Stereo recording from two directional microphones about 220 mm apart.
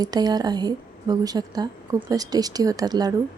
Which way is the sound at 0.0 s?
20° right (ahead or behind).